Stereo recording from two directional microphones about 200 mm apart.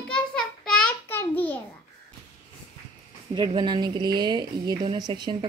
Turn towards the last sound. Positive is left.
turn(degrees=-25)  # may be behind; listen again after turning